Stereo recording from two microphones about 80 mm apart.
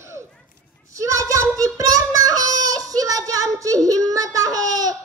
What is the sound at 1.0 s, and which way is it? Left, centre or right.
Child singing, right.